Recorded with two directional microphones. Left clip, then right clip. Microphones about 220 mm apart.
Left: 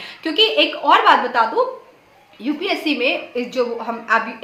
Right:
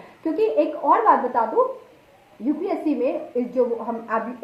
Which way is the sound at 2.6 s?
20° left (ahead or behind).